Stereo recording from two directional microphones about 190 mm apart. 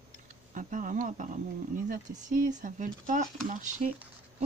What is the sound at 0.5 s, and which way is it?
Speech, 45° right (ahead or behind).